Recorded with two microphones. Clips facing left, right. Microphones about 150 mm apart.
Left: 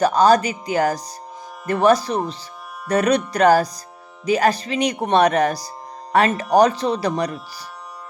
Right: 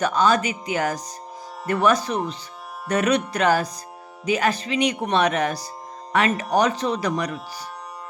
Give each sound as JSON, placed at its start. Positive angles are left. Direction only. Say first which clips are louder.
{"t": 0.0, "sound": "speech", "louder": "left 5 dB", "side_deg": 40}